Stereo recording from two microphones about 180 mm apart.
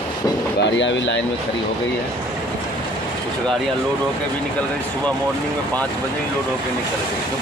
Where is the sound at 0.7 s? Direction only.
90° left.